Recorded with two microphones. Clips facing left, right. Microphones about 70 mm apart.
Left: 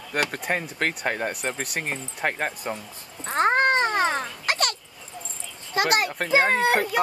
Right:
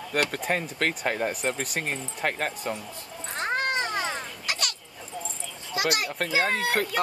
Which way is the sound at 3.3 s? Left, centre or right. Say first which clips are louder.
Left 8 dB; left.